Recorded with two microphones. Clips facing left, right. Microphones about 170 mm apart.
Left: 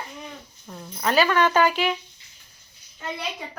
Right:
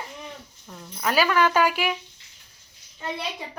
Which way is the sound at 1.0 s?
5° right (ahead or behind).